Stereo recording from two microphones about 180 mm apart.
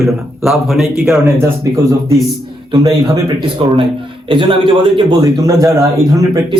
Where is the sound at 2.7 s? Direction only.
25° right (ahead or behind).